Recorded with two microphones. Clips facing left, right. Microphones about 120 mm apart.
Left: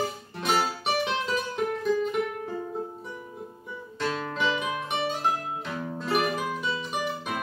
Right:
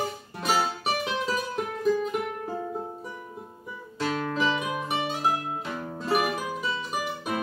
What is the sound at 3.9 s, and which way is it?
Music, 5° right (ahead or behind).